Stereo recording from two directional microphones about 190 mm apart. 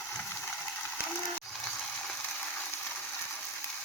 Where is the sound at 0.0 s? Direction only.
5° left (ahead or behind).